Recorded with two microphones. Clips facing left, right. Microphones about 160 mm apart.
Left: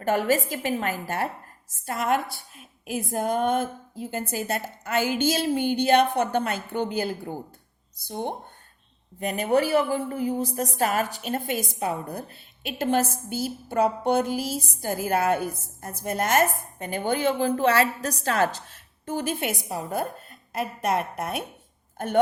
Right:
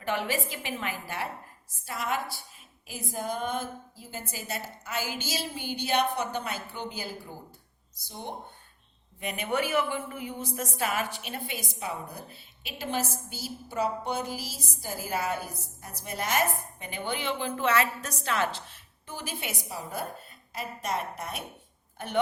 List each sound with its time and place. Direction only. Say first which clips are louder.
0.0 s a woman's voice: left 7 dB; 45° left (ahead or behind)
9.2 s a woman's voice: left 7 dB; 40° left (ahead or behind); by 21.4 s 55° left (ahead or behind)
21.9 s speech: left 6 dB; 45° left (ahead or behind)